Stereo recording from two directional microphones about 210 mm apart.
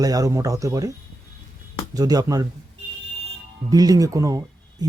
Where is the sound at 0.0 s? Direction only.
15° right (ahead or behind).